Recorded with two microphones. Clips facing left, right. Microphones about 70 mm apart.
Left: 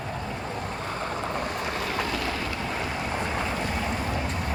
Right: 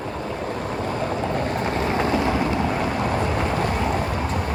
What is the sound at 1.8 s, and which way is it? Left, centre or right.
Vehicle, right.